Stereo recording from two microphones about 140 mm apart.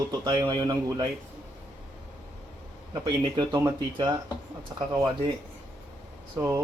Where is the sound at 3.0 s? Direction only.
35° right (ahead or behind).